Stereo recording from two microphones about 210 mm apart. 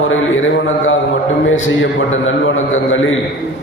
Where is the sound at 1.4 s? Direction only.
65° left (ahead or behind).